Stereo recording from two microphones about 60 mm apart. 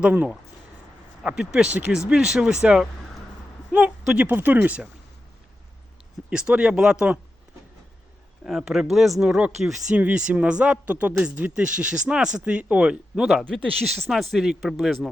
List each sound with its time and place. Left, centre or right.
0.0 s speech: right
4.3 s speech: right
6.3 s speech: centre
8.4 s speech: centre
9.9 s speech: centre
13.7 s speech: centre